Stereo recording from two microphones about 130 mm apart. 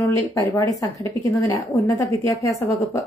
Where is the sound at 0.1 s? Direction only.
25° left (ahead or behind).